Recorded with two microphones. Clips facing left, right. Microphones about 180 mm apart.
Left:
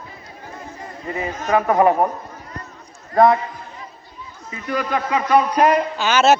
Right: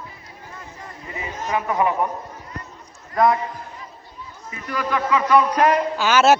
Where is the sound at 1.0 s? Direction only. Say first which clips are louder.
Left 5 dB; 55° left (ahead or behind).